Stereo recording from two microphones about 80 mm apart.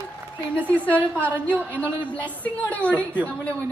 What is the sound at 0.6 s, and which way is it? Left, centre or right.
A woman's voice, centre.